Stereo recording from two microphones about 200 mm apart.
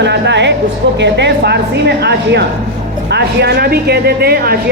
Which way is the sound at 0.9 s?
60° right (ahead or behind).